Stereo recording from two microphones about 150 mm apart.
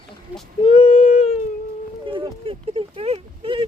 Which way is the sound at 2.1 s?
35° right (ahead or behind).